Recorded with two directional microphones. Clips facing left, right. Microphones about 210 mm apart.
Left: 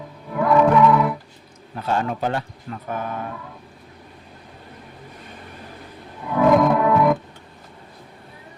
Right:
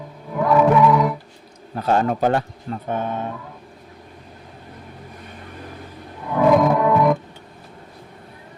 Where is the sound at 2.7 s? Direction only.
25° right (ahead or behind).